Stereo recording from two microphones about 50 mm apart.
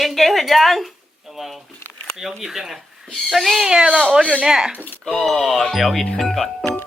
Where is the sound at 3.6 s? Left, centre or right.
Centre.